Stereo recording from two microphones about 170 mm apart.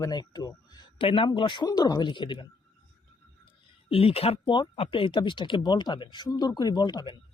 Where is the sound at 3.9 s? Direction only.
35° left (ahead or behind).